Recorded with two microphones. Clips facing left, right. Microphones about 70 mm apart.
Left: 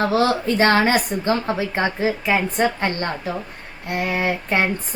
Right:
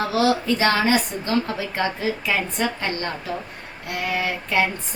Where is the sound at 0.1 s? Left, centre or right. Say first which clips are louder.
Left 1 dB; left.